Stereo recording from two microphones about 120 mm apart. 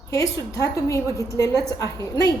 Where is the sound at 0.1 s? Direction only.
30° left (ahead or behind).